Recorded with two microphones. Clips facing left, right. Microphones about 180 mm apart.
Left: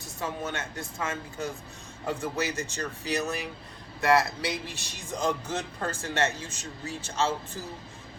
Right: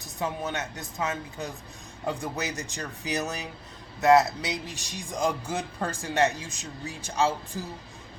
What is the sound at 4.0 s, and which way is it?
A man's voice, 20° right (ahead or behind).